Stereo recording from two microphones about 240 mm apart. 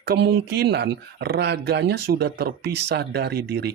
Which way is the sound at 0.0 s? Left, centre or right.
Right.